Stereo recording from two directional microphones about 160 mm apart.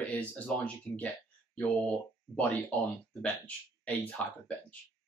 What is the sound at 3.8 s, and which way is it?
Speech, 10° left (ahead or behind).